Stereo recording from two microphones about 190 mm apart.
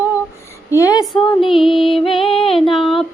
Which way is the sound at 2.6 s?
Centre (ahead or behind).